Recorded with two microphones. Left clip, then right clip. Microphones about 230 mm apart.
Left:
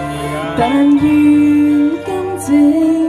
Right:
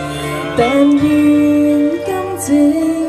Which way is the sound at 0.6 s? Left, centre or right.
Centre.